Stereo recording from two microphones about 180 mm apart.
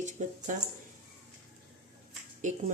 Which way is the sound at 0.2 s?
45° right (ahead or behind).